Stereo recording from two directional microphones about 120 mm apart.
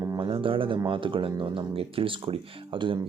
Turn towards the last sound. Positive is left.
turn(degrees=-45)  # may be behind; listen again after turning